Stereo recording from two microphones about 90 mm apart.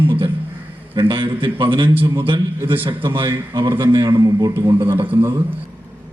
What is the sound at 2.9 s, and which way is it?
A man's voice, 65° right (ahead or behind).